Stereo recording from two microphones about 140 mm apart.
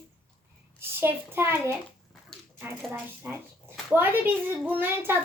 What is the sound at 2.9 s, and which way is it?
A woman's voice, 15° right (ahead or behind).